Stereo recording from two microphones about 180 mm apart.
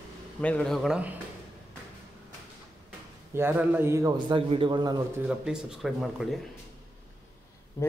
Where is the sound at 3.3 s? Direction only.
10° right (ahead or behind).